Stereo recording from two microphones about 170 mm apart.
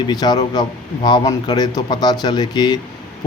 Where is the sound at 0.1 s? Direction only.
25° left (ahead or behind).